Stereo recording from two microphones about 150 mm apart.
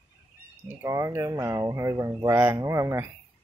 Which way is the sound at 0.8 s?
20° right (ahead or behind).